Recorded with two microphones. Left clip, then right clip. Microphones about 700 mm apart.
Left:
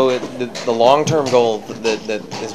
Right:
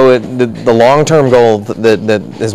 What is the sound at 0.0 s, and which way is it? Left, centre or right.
Speech, right.